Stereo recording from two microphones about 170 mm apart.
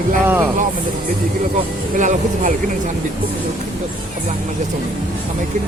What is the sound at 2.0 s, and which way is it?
Speech, 45° right (ahead or behind).